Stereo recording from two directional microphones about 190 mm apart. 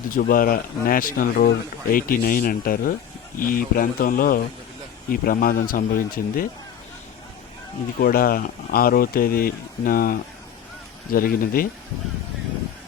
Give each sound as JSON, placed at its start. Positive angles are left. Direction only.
{"t": 0.1, "sound": "a man's voice", "side_deg": 45}
{"t": 7.9, "sound": "a man's voice", "side_deg": 50}